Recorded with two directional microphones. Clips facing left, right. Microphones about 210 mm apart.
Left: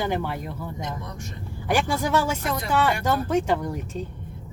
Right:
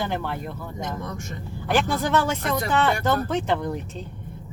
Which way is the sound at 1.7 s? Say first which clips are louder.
Right 1 dB; 10° left (ahead or behind).